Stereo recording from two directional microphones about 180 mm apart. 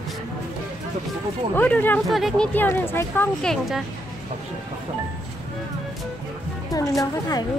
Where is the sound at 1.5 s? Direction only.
10° left (ahead or behind).